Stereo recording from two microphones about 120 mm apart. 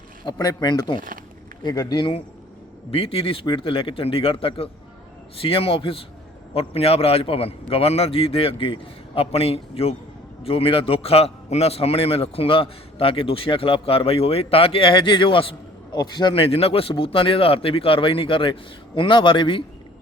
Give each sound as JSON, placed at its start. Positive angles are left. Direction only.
{"t": 0.3, "sound": "a man's voice", "side_deg": 35}
{"t": 2.0, "sound": "a man's voice", "side_deg": 45}
{"t": 16.0, "sound": "a man's voice", "side_deg": 35}
{"t": 16.3, "sound": "a man's voice", "side_deg": 55}